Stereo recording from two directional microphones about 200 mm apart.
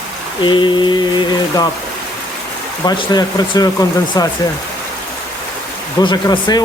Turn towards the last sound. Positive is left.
turn(degrees=20)  # may be behind; listen again after turning